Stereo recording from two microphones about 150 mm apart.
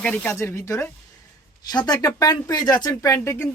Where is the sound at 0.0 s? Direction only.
10° left (ahead or behind).